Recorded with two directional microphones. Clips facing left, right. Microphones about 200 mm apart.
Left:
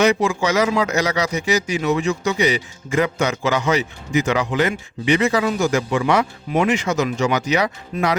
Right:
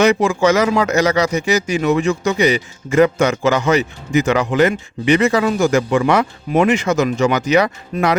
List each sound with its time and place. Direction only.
0.0 s speech: 50° right (ahead or behind)